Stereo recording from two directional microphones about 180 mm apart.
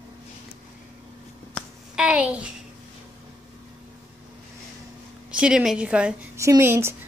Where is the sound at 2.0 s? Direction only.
5° right (ahead or behind).